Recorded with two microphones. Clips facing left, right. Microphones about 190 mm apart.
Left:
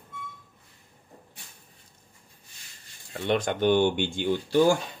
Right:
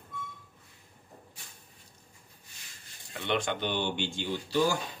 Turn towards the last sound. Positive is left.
turn(degrees=55)  # may be behind; listen again after turning